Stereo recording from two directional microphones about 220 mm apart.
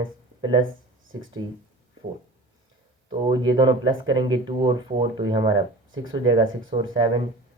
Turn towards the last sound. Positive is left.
turn(degrees=-20)  # may be behind; listen again after turning